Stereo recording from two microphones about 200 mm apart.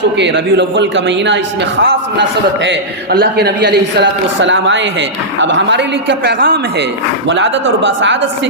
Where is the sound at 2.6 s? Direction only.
60° right (ahead or behind).